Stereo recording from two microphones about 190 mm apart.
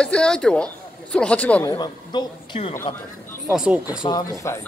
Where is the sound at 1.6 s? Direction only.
20° left (ahead or behind).